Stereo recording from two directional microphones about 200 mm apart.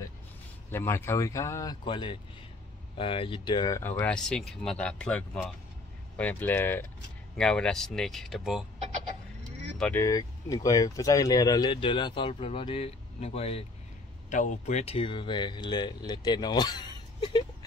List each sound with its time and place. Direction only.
0.7 s speech: 10° left (ahead or behind)
9.8 s speech: 5° left (ahead or behind)
10.0 s speech: 15° left (ahead or behind)